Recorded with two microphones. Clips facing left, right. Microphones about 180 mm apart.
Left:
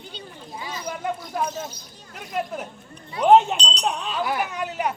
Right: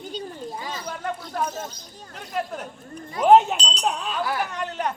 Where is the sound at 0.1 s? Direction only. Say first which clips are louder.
Right 7 dB; 45° right (ahead or behind).